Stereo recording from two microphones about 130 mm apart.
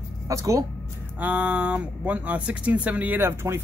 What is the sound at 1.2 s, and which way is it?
Speech, 10° right (ahead or behind).